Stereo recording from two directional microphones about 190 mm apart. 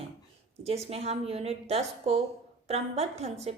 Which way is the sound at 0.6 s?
30° right (ahead or behind).